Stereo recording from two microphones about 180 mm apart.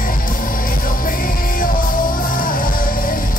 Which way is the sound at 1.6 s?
50° left (ahead or behind).